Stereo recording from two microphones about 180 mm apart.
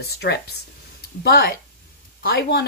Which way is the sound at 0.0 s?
65° left (ahead or behind).